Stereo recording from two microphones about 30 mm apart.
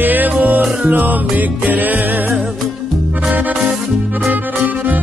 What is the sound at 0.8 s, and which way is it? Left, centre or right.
Music, right.